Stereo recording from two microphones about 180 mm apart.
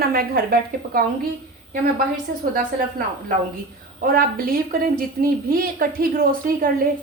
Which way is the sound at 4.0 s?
55° right (ahead or behind).